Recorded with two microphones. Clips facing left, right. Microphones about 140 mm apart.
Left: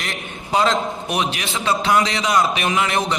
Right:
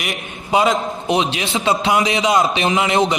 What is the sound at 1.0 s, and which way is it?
A man's voice, 20° right (ahead or behind).